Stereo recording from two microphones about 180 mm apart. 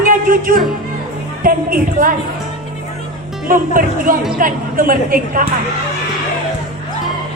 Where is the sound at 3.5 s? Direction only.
50° right (ahead or behind).